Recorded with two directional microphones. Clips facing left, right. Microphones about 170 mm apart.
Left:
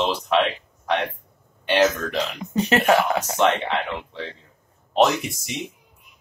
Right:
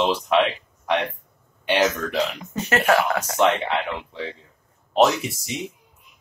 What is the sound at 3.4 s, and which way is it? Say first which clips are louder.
Speech: right 1 dB; 10° right (ahead or behind).